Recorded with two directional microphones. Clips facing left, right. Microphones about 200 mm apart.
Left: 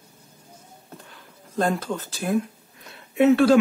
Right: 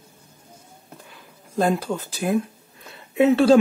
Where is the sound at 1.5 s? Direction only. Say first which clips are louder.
Right 2 dB; 10° right (ahead or behind).